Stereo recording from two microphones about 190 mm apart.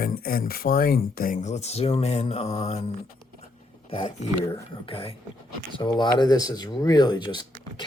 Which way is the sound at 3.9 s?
25° left (ahead or behind).